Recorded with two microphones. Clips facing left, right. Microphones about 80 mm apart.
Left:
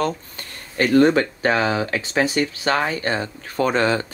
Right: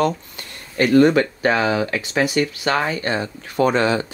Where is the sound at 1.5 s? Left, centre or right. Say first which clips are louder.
Right 1 dB; left.